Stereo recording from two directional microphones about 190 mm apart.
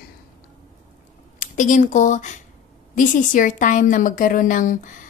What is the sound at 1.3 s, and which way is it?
Speech, 40° left (ahead or behind).